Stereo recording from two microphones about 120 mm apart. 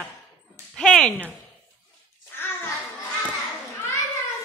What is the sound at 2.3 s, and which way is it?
Bathtub, 20° left (ahead or behind).